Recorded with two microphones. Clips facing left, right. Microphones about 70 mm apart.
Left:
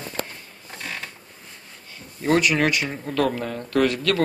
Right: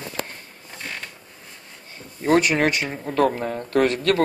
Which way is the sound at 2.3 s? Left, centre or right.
Right.